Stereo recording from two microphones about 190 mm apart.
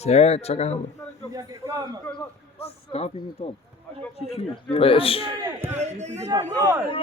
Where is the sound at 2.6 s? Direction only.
30° left (ahead or behind).